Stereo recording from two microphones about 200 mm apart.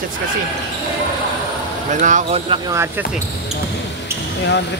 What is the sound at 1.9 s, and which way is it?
Speech, 40° right (ahead or behind).